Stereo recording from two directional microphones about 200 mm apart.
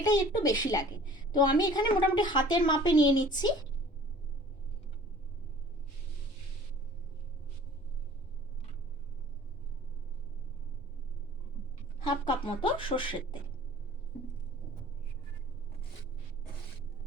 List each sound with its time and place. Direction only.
0.0 s a woman's voice: 20° left (ahead or behind)
12.0 s a woman's voice: 25° left (ahead or behind)